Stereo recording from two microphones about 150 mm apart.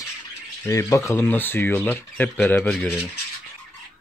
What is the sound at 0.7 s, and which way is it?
A man's voice, 20° left (ahead or behind).